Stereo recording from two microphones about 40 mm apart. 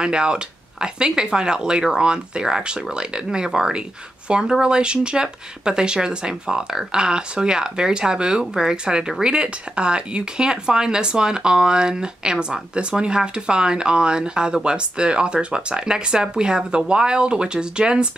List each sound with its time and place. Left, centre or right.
0.0 s speech: right